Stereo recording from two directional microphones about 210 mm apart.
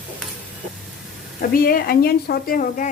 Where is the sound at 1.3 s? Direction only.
45° left (ahead or behind).